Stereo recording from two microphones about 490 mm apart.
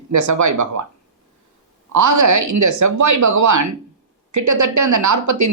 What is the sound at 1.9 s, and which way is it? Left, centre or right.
A woman's voice, right.